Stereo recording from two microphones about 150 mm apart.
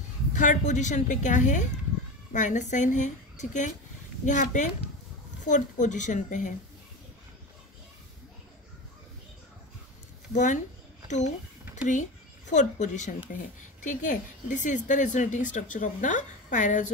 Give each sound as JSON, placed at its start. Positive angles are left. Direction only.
{"t": 0.3, "sound": "speech", "side_deg": 55}
{"t": 10.3, "sound": "speech", "side_deg": 55}